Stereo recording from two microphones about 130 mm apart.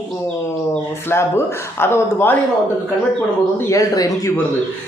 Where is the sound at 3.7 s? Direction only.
25° left (ahead or behind).